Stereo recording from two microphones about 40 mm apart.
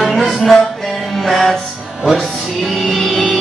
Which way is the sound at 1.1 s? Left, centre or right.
Centre.